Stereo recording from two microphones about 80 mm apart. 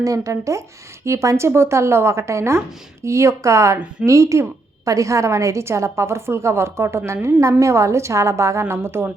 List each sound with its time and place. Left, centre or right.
0.0 s speech: right